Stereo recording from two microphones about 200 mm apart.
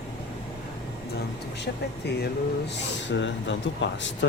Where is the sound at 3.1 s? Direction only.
65° left (ahead or behind).